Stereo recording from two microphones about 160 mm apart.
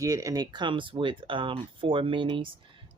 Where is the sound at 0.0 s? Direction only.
20° right (ahead or behind).